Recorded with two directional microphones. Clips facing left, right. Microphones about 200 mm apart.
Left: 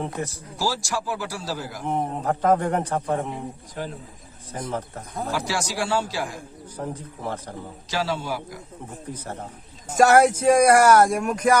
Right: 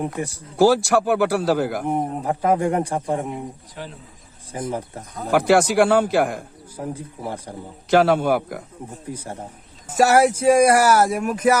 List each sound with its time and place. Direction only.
0.0 s speech: 15° right (ahead or behind)
0.5 s a man's voice: 55° right (ahead or behind)
1.9 s speech: 10° right (ahead or behind)
3.8 s a man's voice: 40° left (ahead or behind)
4.5 s speech: 10° right (ahead or behind)
5.3 s a man's voice: 55° right (ahead or behind)
6.7 s speech: 10° right (ahead or behind)
7.9 s a man's voice: 55° right (ahead or behind)
9.1 s speech: 10° right (ahead or behind)